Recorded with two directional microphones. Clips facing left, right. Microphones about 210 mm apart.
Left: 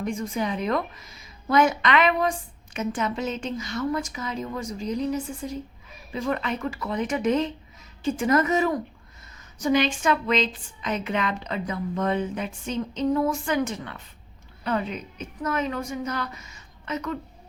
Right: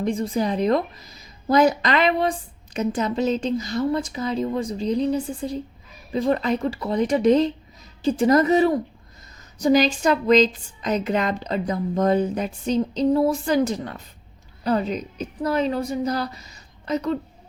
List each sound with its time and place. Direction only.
0.0 s a woman's voice: 35° right (ahead or behind)